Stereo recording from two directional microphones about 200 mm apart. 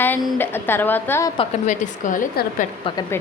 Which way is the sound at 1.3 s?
40° left (ahead or behind).